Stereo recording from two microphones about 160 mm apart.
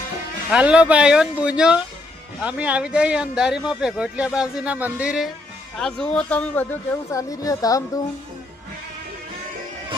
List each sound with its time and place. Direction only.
0.5 s speech: 5° right (ahead or behind); by 8.0 s 20° left (ahead or behind)